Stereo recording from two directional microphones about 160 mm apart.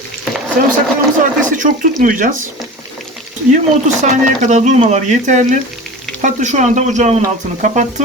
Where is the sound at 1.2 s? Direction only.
55° right (ahead or behind).